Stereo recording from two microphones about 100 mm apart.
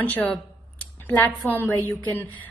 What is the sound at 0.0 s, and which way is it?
A woman's voice, 15° left (ahead or behind).